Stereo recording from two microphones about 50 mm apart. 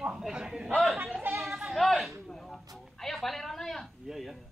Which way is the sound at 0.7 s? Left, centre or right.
Centre.